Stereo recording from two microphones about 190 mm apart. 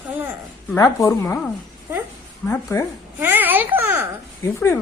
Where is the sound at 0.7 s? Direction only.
15° left (ahead or behind).